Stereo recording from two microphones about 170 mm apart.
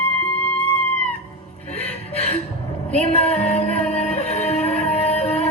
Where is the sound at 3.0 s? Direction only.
35° left (ahead or behind).